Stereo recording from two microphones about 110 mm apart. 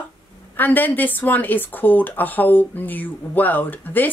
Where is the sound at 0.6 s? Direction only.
15° left (ahead or behind).